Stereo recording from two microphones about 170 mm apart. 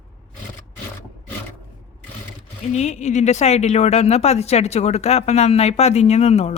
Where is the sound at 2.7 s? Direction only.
40° left (ahead or behind).